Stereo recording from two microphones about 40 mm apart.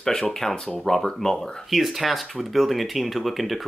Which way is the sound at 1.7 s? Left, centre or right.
Centre.